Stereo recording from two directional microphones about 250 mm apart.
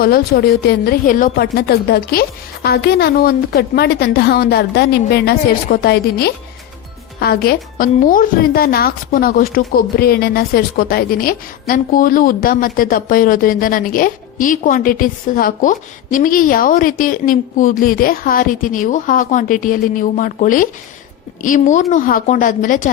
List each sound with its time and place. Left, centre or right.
0.0 s a woman's voice: left